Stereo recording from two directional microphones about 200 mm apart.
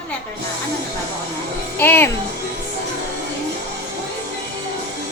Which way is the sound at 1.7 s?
10° left (ahead or behind).